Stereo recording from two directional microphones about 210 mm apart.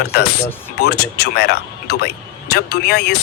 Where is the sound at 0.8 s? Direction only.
50° left (ahead or behind).